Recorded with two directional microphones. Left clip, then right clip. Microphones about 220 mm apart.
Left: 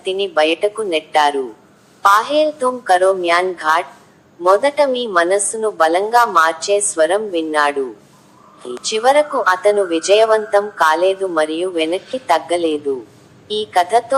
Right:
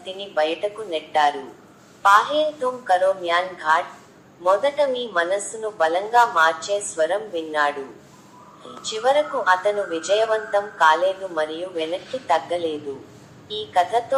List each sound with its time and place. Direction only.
0.0 s speech: 30° left (ahead or behind)